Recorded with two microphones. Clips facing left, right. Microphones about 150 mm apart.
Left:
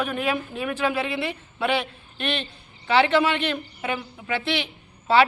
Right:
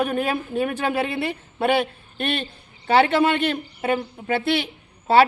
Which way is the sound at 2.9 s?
45° right (ahead or behind).